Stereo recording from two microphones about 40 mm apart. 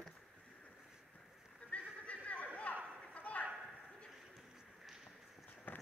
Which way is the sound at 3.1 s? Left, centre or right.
Left.